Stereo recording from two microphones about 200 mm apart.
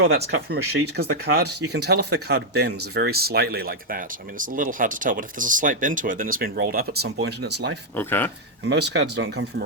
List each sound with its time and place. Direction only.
0.3 s speech: 55° right (ahead or behind)
7.9 s speech: 10° left (ahead or behind)
8.6 s speech: 60° right (ahead or behind)